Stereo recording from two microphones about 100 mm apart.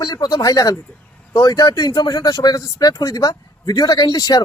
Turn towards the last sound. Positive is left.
turn(degrees=40)  # may be behind; listen again after turning